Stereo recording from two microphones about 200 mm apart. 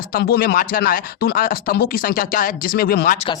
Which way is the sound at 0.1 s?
50° left (ahead or behind).